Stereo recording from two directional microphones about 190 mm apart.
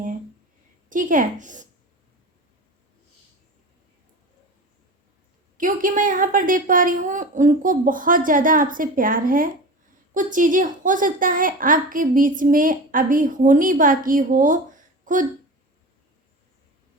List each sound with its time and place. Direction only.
0.9 s a woman's voice: 45° right (ahead or behind)
5.5 s a woman's voice: 45° right (ahead or behind)